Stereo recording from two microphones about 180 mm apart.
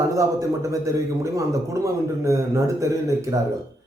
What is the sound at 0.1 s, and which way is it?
A man's voice, 15° right (ahead or behind).